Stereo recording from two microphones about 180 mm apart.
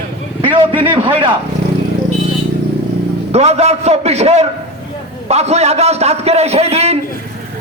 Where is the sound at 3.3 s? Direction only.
35° right (ahead or behind).